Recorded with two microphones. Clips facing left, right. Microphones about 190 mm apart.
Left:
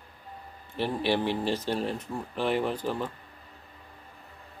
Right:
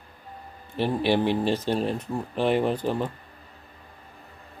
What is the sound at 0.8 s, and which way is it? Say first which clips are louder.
Speech: right 4 dB; 15° right (ahead or behind).